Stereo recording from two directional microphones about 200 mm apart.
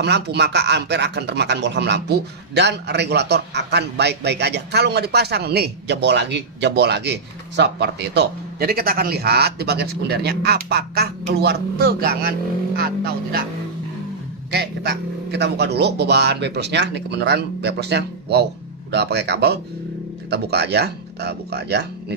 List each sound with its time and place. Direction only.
0.0 s speech: 60° right (ahead or behind)
14.5 s speech: 60° right (ahead or behind)